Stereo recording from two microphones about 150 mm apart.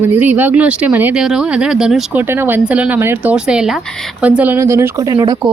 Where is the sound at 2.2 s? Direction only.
15° right (ahead or behind).